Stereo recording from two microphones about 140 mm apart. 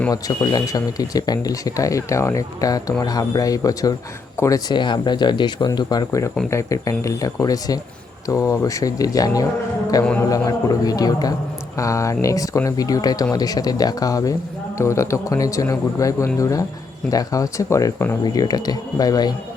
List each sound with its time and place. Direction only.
0.1 s speech: 25° left (ahead or behind)